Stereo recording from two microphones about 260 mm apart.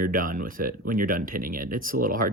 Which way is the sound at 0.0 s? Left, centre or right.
Right.